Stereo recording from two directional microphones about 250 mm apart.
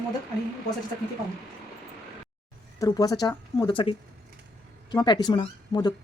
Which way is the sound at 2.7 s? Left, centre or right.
Centre.